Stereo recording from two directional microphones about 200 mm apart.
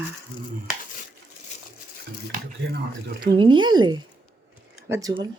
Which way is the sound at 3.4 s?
25° right (ahead or behind).